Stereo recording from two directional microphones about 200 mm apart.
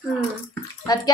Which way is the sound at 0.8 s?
20° left (ahead or behind).